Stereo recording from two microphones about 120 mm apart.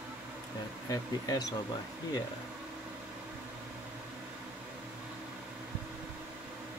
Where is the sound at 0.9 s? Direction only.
30° left (ahead or behind).